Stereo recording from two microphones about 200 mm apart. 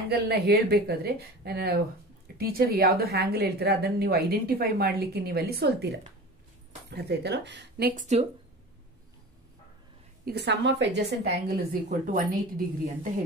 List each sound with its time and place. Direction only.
0.1 s a woman's voice: 50° right (ahead or behind); by 8.3 s 35° right (ahead or behind)
10.2 s a woman's voice: 55° right (ahead or behind)